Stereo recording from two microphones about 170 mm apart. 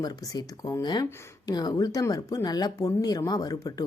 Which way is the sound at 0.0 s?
25° left (ahead or behind).